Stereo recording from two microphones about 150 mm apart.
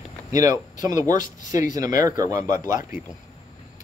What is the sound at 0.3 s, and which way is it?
Speech, 20° right (ahead or behind).